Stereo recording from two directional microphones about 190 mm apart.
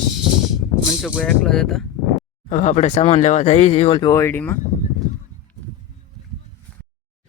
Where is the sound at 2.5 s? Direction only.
40° left (ahead or behind).